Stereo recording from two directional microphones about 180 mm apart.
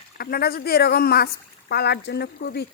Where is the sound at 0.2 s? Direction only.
60° left (ahead or behind).